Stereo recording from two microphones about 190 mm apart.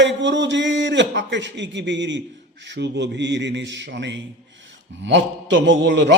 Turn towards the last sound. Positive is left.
turn(degrees=-65)  # may be behind; listen again after turning